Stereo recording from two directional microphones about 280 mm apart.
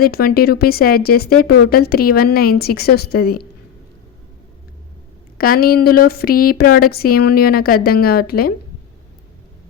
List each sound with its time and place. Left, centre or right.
0.0 s speech: left
5.4 s speech: left